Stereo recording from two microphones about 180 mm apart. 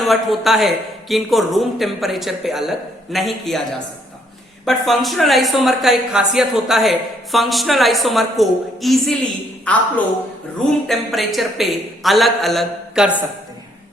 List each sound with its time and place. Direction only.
0.0 s speech: centre (ahead or behind)
10.8 s speech: centre (ahead or behind)